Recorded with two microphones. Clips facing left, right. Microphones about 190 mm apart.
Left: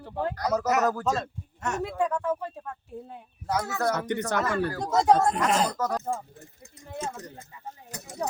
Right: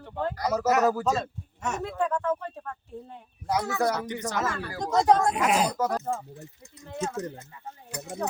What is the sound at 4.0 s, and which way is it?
Speech, 60° left (ahead or behind).